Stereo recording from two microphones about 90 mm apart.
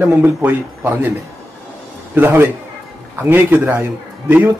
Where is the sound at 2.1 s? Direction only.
25° right (ahead or behind).